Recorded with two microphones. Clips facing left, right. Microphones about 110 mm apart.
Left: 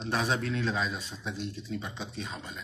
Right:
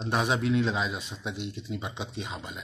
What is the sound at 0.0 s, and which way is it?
Speech, 15° right (ahead or behind).